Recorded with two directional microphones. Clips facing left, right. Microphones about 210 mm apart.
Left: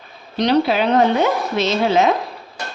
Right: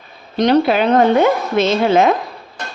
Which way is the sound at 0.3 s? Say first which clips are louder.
Right 3 dB; 50° right (ahead or behind).